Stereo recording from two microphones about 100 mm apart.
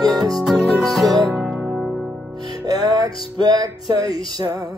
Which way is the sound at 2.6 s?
40° right (ahead or behind).